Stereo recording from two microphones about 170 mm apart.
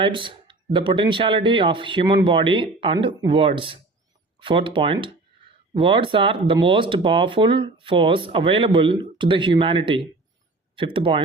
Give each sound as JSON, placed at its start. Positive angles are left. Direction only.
{"t": 0.0, "sound": "speech", "side_deg": -30}